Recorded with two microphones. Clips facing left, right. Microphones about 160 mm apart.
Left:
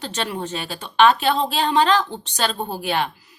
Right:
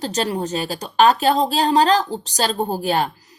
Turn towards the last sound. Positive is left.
turn(degrees=-40)  # may be behind; listen again after turning